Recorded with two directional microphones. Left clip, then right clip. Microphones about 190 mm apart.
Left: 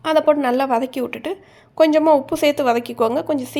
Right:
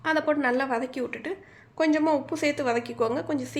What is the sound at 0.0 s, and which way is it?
A woman's voice, 35° left (ahead or behind).